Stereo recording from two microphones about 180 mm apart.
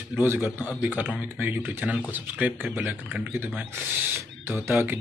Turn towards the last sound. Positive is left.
turn(degrees=-10)  # may be behind; listen again after turning